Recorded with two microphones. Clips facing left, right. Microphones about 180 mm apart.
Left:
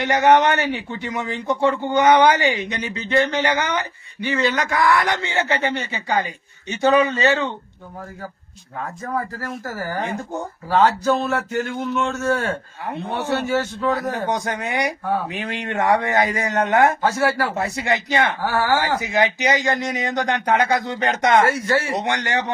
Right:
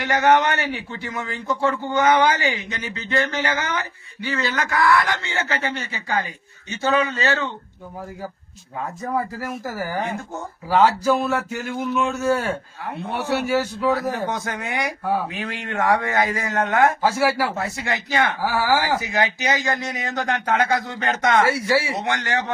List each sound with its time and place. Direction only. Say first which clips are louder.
0.0 s a man's voice: left 2 dB; 20° left (ahead or behind)
9.0 s a man's voice: right 2 dB; 15° right (ahead or behind)
14.1 s a man's voice: left 2 dB; 15° left (ahead or behind)
17.0 s a man's voice: even; 10° right (ahead or behind)
17.6 s a man's voice: left 4 dB; 20° left (ahead or behind)
18.4 s a man's voice: left 1 dB; 10° right (ahead or behind)
19.0 s a man's voice: left 3 dB; 20° left (ahead or behind)
21.7 s a man's voice: even; 10° right (ahead or behind)
21.9 s a man's voice: left 2 dB; 20° left (ahead or behind)